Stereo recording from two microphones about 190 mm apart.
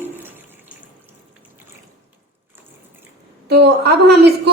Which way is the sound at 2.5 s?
10° right (ahead or behind).